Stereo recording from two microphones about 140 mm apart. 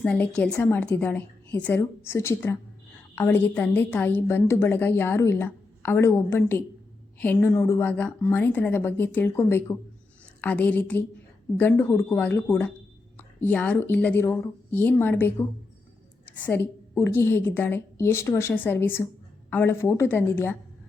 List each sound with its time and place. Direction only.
0.0 s a woman's voice: 5° left (ahead or behind)
16.2 s a sound: 10° left (ahead or behind)
16.9 s a woman's voice: 20° left (ahead or behind)